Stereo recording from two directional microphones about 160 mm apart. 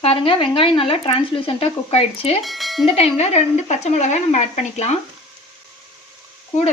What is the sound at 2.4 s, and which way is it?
Speech, centre (ahead or behind).